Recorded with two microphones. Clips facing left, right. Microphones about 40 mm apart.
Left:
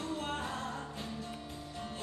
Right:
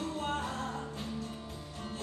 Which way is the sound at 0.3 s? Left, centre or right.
Centre.